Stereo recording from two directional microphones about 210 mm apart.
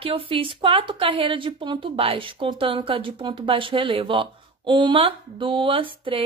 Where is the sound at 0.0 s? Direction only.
25° right (ahead or behind).